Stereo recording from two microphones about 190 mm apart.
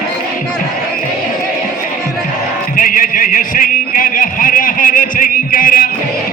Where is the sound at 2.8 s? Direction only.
45° left (ahead or behind).